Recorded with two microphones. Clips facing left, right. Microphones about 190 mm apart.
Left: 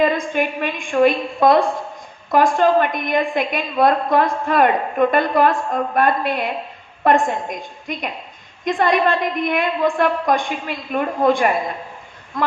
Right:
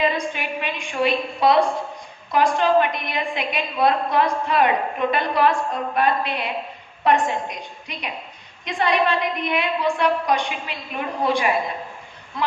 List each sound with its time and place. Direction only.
0.3 s a woman's voice: 50° left (ahead or behind)